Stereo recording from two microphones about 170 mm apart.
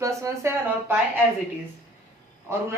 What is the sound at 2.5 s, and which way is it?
Speech, 15° right (ahead or behind).